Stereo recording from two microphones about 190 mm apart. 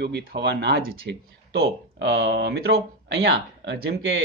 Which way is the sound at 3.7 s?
70° right (ahead or behind).